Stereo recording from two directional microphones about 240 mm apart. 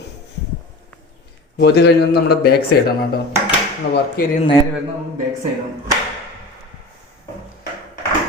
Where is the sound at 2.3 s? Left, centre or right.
Left.